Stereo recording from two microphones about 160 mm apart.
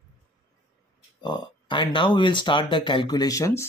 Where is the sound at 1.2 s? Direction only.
30° left (ahead or behind).